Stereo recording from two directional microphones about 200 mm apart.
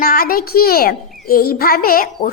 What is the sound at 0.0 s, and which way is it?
A woman's voice, 50° left (ahead or behind).